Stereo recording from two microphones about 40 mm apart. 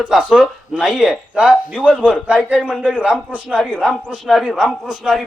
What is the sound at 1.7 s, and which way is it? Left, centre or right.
Speech, left.